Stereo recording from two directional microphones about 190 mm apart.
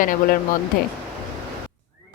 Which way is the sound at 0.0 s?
45° left (ahead or behind).